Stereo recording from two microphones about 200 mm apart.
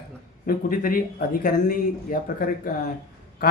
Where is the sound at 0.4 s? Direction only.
45° left (ahead or behind).